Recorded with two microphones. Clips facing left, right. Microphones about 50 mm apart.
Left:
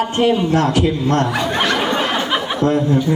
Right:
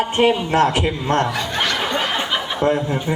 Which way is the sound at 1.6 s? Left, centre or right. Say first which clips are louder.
Left 3 dB; centre.